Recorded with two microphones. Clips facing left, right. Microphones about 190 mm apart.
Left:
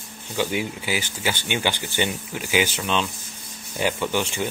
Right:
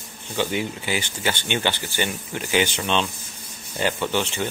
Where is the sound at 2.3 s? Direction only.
5° left (ahead or behind).